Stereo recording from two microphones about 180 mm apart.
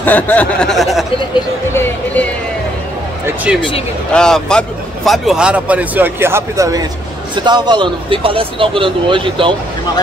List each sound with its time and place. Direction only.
0.0 s speech: 10° left (ahead or behind)
1.7 s music: 10° left (ahead or behind)
4.1 s speech: 5° left (ahead or behind); by 9.5 s 30° right (ahead or behind)